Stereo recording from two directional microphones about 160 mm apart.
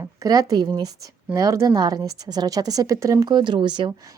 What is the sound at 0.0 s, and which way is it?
A woman's voice, 20° right (ahead or behind).